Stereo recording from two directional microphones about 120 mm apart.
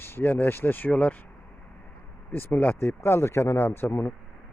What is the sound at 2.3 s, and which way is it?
Speech, 15° left (ahead or behind).